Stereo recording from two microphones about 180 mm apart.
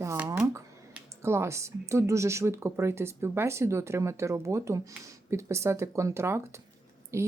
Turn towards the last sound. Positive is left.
turn(degrees=-15)  # may be behind; listen again after turning